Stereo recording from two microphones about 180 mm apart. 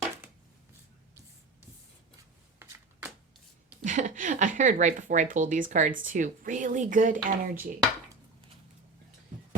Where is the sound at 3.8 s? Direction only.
45° right (ahead or behind).